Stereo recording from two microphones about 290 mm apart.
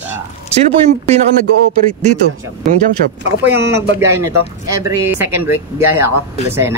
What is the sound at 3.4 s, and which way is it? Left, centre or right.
Speech, centre.